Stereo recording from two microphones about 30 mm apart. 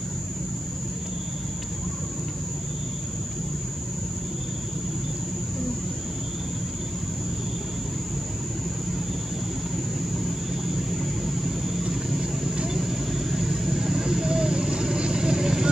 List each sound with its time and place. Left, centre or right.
10.1 s vehicle: centre